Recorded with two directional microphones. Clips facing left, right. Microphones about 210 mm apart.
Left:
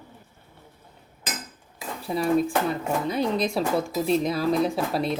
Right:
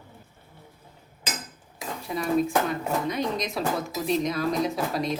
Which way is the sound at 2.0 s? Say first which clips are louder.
Left 2 dB; 30° left (ahead or behind).